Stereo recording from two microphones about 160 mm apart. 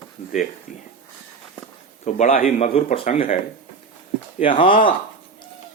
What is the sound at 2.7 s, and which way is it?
Speech, 35° left (ahead or behind).